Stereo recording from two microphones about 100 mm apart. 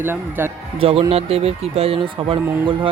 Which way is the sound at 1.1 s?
80° right.